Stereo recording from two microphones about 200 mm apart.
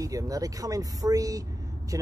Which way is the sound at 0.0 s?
15° right (ahead or behind).